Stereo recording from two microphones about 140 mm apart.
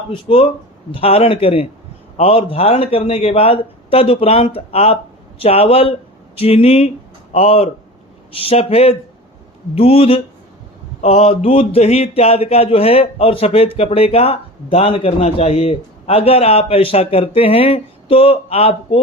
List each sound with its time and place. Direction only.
0.1 s speech: 40° left (ahead or behind)